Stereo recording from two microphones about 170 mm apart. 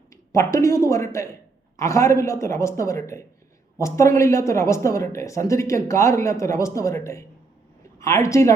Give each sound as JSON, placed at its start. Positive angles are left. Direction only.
{"t": 0.3, "sound": "a woman's voice", "side_deg": 20}